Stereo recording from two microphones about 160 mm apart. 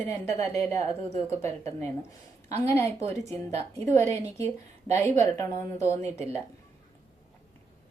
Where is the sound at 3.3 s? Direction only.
40° right (ahead or behind).